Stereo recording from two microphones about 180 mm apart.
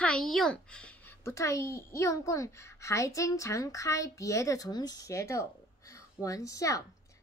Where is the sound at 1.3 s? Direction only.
15° left (ahead or behind).